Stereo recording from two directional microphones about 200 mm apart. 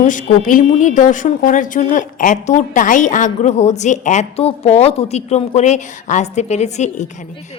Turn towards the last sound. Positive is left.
turn(degrees=35)  # may be behind; listen again after turning